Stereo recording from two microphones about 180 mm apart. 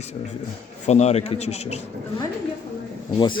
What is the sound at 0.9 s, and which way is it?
Speech, 35° left (ahead or behind).